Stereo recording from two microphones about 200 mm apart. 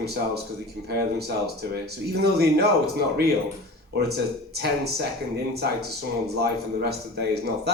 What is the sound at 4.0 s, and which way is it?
Speech, 55° right (ahead or behind).